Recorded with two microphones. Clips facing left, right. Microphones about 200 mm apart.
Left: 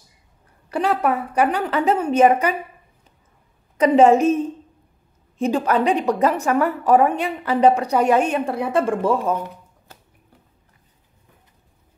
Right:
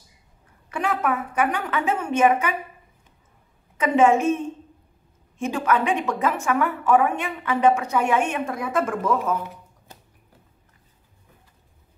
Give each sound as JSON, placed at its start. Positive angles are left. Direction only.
{"t": 0.7, "sound": "a woman's voice", "side_deg": 35}
{"t": 3.7, "sound": "a woman's voice", "side_deg": 35}